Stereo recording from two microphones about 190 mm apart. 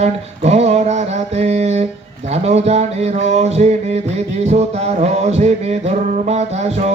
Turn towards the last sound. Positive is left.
turn(degrees=-35)  # may be behind; listen again after turning